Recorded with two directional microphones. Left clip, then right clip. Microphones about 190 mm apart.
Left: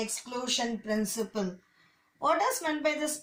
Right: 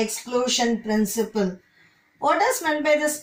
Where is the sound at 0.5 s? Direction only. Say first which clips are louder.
Right 8 dB; 20° left (ahead or behind).